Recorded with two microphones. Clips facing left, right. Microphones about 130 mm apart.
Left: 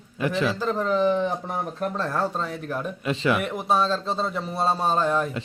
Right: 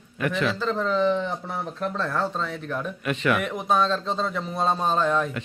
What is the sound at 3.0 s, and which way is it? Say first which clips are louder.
Speech: left 1 dB; 30° left (ahead or behind).